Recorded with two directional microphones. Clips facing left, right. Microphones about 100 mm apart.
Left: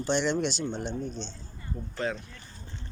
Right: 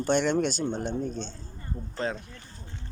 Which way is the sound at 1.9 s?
35° right (ahead or behind).